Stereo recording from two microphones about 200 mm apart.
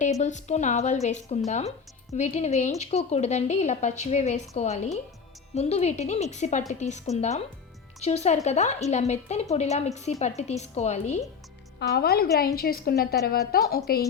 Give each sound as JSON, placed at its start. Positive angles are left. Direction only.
{"t": 0.0, "sound": "a woman's voice", "side_deg": 35}
{"t": 11.8, "sound": "a woman's voice", "side_deg": 50}